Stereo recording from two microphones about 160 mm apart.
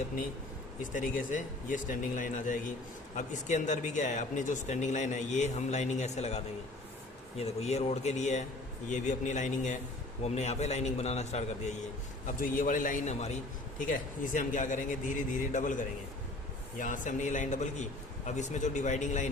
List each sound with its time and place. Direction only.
0.9 s speech: 55° left (ahead or behind)
12.4 s speech: 55° left (ahead or behind)
13.7 s speech: 55° left (ahead or behind)